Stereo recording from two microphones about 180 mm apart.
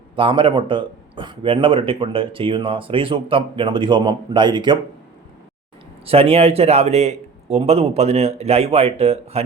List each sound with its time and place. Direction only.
0.2 s speech: 30° right (ahead or behind)
6.1 s a man's voice: 35° right (ahead or behind)